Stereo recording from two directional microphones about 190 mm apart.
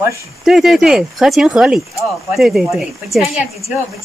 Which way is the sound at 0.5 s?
Centre (ahead or behind).